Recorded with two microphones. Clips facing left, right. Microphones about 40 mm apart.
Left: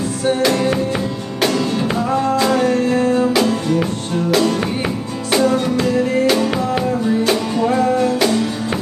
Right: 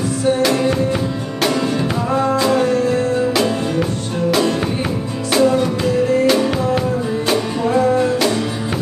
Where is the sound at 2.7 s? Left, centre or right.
Left.